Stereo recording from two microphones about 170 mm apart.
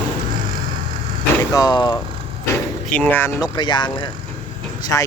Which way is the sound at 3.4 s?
25° left (ahead or behind).